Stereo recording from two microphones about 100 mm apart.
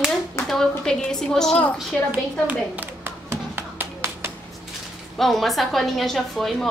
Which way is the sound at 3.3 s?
25° right (ahead or behind).